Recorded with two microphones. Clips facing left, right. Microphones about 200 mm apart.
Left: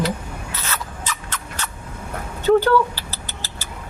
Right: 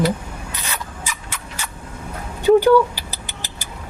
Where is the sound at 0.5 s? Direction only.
15° right (ahead or behind).